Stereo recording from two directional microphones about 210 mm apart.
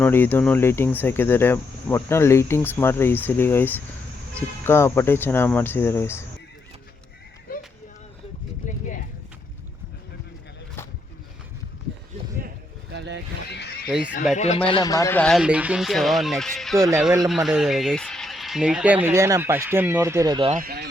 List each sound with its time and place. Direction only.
0.0 s speech: 10° left (ahead or behind)
12.9 s vehicle: 55° right (ahead or behind)
13.5 s neigh: 50° left (ahead or behind)
14.3 s speech: 30° left (ahead or behind); by 16.7 s centre (ahead or behind)
16.7 s speech: 15° right (ahead or behind)
17.2 s speech: centre (ahead or behind); by 20.5 s 20° right (ahead or behind)
20.5 s speech: 45° right (ahead or behind)